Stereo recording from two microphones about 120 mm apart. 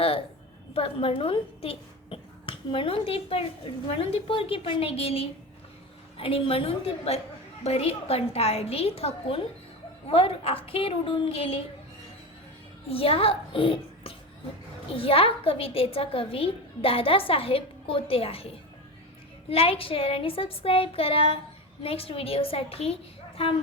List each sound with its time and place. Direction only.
0.7 s a woman's voice: 50° left (ahead or behind)
12.9 s a child's voice: 50° left (ahead or behind)